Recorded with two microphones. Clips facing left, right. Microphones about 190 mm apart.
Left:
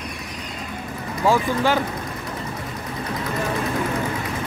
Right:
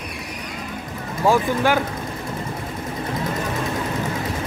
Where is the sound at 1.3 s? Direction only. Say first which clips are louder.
Right 1 dB; 15° right (ahead or behind).